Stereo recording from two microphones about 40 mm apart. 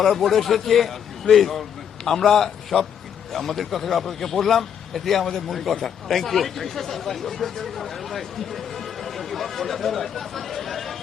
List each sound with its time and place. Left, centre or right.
0.0 s a man's voice: centre